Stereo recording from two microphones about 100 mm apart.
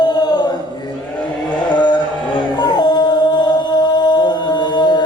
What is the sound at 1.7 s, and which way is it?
Music, 45° left (ahead or behind).